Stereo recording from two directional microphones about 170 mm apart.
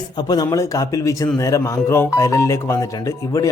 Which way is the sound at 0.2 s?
20° left (ahead or behind).